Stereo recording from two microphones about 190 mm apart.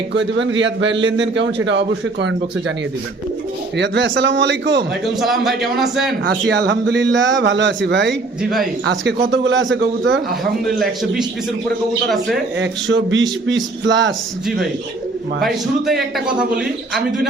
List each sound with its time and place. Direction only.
0.1 s a man's voice: 70° right (ahead or behind)
3.8 s a man's voice: 70° right (ahead or behind)
5.0 s a man's voice: centre (ahead or behind)
6.5 s a man's voice: 60° right (ahead or behind); by 10.2 s 80° right
10.8 s a man's voice: centre (ahead or behind)
12.5 s a man's voice: 75° right (ahead or behind)
15.4 s a man's voice: centre (ahead or behind)